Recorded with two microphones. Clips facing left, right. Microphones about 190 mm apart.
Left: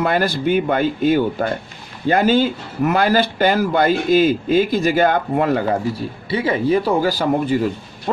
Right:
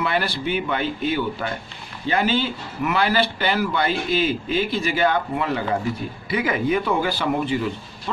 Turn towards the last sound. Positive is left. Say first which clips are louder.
# left 5 dB
turn(degrees=40)  # may be behind; listen again after turning